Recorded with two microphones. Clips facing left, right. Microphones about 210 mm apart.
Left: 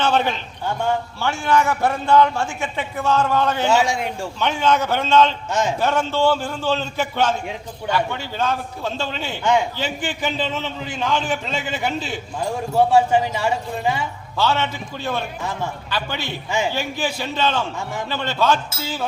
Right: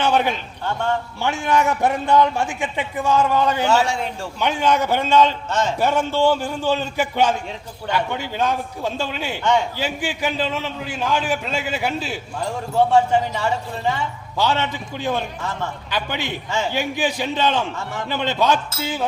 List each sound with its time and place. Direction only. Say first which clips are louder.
0.0 s a man's voice: right 1 dB; 15° right (ahead or behind)
3.7 s speech: even; 10° left (ahead or behind)
4.4 s a man's voice: even; 15° right (ahead or behind)
5.5 s speech: even; 10° left (ahead or behind)
5.8 s a man's voice: right 2 dB; 15° right (ahead or behind)
9.4 s speech: left 1 dB; 10° left (ahead or behind)
9.7 s a man's voice: right 1 dB; 10° right (ahead or behind)
12.4 s speech: left 1 dB; 10° left (ahead or behind)
14.3 s a man's voice: even; 15° right (ahead or behind)
16.5 s speech: left 3 dB; 15° left (ahead or behind)
16.7 s a man's voice: right 2 dB; 15° right (ahead or behind)